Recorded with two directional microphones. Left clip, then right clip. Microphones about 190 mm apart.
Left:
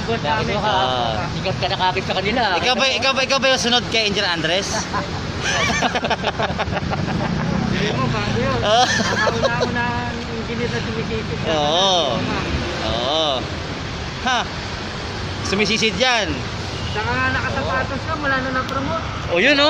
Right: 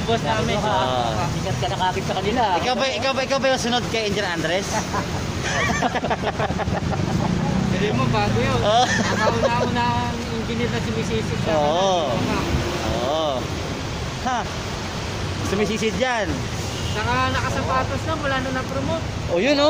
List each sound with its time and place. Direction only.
0.8 s speech: 15° left (ahead or behind)
1.8 s speech: 40° left (ahead or behind)
2.6 s speech: 15° left (ahead or behind)
8.6 s speech: 10° left (ahead or behind)
11.5 s speech: 20° left (ahead or behind)
13.1 s vehicle: 20° left (ahead or behind)
15.6 s speech: 20° left (ahead or behind)
19.3 s speech: 5° left (ahead or behind)